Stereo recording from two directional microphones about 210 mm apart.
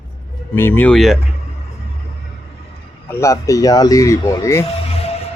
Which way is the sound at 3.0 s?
15° left (ahead or behind).